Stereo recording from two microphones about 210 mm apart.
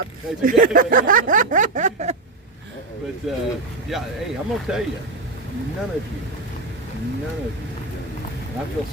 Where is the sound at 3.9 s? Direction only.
Centre (ahead or behind).